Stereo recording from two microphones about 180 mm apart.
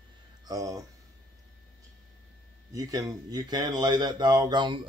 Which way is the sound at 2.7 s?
20° right (ahead or behind).